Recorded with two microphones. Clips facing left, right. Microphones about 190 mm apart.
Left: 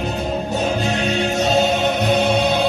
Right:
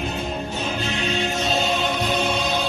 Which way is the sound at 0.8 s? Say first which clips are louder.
Left 6 dB; 40° left (ahead or behind).